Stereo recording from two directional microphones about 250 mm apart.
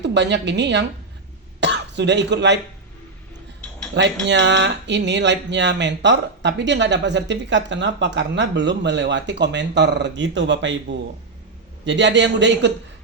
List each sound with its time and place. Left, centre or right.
0.0 s speech: right
3.9 s speech: right